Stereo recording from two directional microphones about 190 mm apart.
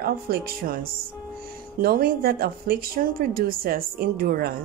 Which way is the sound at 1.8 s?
50° right (ahead or behind).